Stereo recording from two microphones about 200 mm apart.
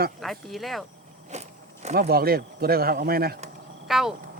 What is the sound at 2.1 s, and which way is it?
Speech, 50° right (ahead or behind).